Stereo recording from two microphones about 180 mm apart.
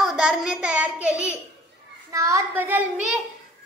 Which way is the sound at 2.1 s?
20° right (ahead or behind).